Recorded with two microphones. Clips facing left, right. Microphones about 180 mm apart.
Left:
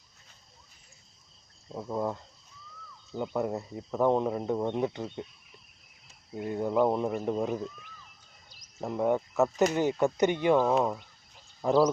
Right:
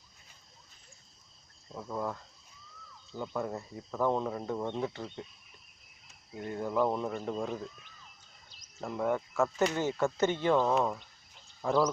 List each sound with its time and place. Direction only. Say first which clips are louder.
1.7 s speech: left 4 dB; 20° left (ahead or behind)
6.3 s speech: left 4 dB; 15° left (ahead or behind)
8.8 s speech: left 4 dB; 20° left (ahead or behind)